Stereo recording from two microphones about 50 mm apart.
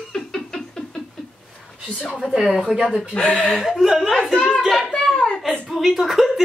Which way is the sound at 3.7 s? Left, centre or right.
Centre.